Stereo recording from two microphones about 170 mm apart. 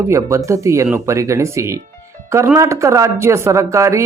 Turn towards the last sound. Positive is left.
turn(degrees=-15)  # may be behind; listen again after turning